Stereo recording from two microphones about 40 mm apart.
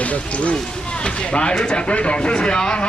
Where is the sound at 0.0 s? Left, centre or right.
Left.